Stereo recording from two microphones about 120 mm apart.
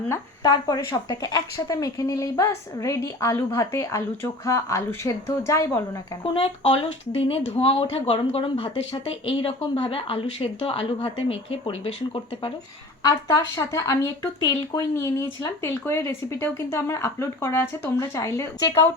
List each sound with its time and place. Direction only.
0.4 s speech: 35° left (ahead or behind)
6.3 s a woman's voice: 55° left (ahead or behind)
13.0 s speech: 30° left (ahead or behind)